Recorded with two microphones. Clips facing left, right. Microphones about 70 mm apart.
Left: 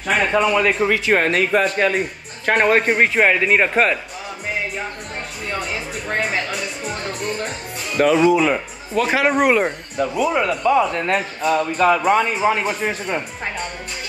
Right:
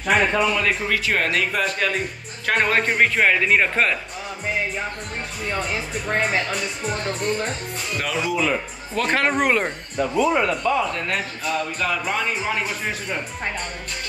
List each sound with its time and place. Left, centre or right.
0.0 s speech: centre
0.8 s speech: centre
1.1 s speech: left
2.4 s speech: centre
5.5 s speech: centre
8.0 s speech: left
8.9 s speech: centre
11.1 s speech: left